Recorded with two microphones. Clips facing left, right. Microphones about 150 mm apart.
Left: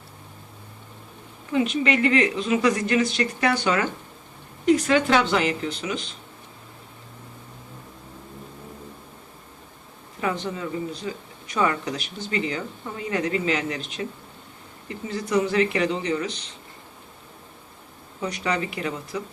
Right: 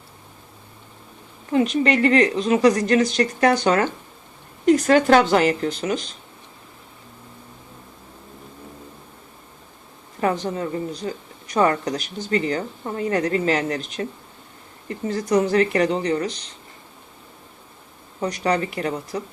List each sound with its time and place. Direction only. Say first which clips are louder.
1.5 s a woman's voice: right 3 dB; 40° right (ahead or behind)
10.2 s speech: right 5 dB; 45° right (ahead or behind)
18.2 s a woman's voice: right 4 dB; 40° right (ahead or behind)